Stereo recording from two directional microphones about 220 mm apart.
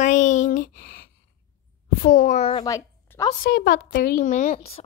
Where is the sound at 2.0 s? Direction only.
35° left (ahead or behind).